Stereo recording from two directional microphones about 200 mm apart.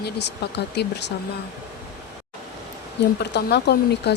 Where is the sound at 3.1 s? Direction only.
55° left (ahead or behind).